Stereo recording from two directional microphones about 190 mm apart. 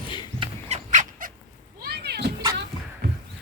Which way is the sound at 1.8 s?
55° right (ahead or behind).